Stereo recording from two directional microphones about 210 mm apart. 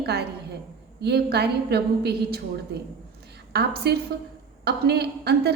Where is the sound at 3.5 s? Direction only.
50° right (ahead or behind).